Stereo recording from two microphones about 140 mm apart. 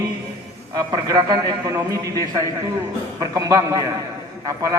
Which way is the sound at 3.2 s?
25° right (ahead or behind).